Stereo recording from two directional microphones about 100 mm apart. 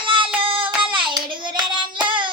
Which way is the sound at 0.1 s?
55° right (ahead or behind).